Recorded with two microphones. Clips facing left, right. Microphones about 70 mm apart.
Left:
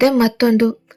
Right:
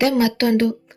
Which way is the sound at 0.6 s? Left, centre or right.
Left.